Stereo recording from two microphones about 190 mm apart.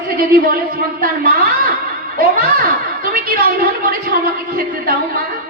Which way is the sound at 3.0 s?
50° right (ahead or behind).